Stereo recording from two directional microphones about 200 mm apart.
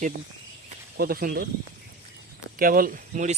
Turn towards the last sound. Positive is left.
turn(degrees=-40)  # may be behind; listen again after turning